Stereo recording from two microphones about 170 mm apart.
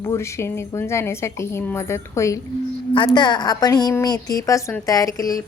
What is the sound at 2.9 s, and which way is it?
A woman's voice, 30° left (ahead or behind).